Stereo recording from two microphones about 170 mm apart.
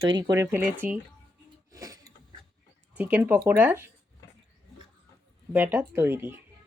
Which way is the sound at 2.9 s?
10° right (ahead or behind).